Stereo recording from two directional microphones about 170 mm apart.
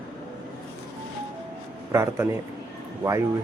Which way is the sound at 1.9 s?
15° right (ahead or behind).